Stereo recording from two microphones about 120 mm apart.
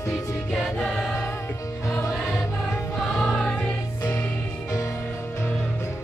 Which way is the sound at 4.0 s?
30° left (ahead or behind).